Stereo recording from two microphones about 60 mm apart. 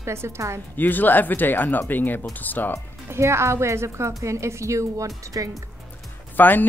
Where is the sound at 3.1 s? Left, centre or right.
Right.